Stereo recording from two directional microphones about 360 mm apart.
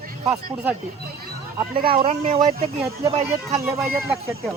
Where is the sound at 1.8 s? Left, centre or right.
Centre.